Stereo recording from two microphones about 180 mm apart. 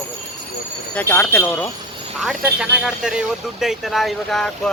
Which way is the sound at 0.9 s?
10° left (ahead or behind).